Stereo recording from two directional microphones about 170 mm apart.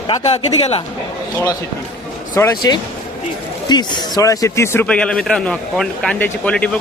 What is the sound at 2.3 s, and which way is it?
Speech, 20° left (ahead or behind).